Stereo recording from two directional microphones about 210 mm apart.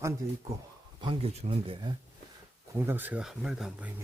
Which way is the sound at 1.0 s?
30° right (ahead or behind).